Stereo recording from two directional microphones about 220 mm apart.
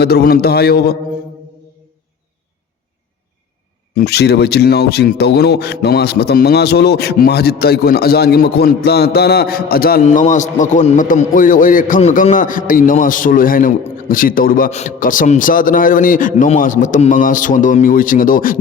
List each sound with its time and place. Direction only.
0.0 s a man's voice: 45° left (ahead or behind)
3.9 s a man's voice: 45° left (ahead or behind)